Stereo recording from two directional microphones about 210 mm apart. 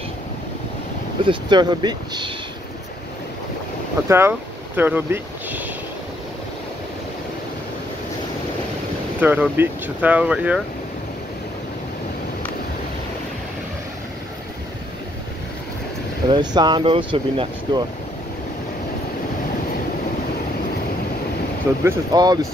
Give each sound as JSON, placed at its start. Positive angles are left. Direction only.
{"t": 1.2, "sound": "speech", "side_deg": -20}
{"t": 4.1, "sound": "speech", "side_deg": -10}
{"t": 9.2, "sound": "speech", "side_deg": -10}
{"t": 16.3, "sound": "speech", "side_deg": -20}
{"t": 21.8, "sound": "speech", "side_deg": -20}